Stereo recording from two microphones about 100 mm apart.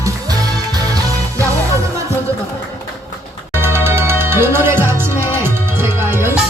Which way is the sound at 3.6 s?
25° right (ahead or behind).